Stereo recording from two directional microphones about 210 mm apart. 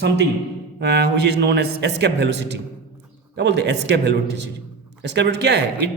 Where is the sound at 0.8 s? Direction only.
55° right (ahead or behind).